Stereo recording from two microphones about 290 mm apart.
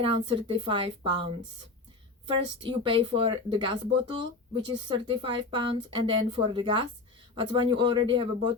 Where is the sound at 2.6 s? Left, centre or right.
Centre.